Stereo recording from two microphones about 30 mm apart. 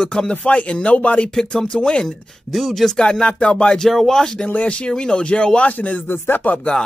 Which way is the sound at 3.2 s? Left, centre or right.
Left.